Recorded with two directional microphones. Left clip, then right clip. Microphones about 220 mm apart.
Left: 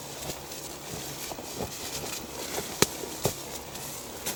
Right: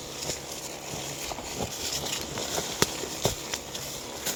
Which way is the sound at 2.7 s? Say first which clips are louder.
Left 4 dB; 35° right (ahead or behind).